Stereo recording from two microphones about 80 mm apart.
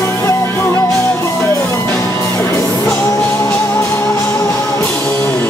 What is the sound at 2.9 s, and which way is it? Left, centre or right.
Music, left.